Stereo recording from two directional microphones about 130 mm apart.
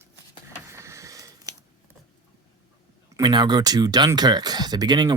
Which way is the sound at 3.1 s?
35° right (ahead or behind).